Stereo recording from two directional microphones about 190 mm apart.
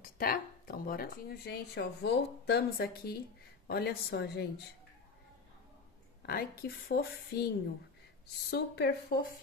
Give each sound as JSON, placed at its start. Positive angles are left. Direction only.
{"t": 0.0, "sound": "a woman's voice", "side_deg": 50}
{"t": 6.2, "sound": "speech", "side_deg": 55}
{"t": 8.5, "sound": "a woman's voice", "side_deg": 60}